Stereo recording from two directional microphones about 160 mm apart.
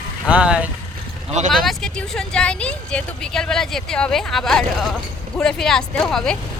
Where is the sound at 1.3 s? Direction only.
45° right (ahead or behind).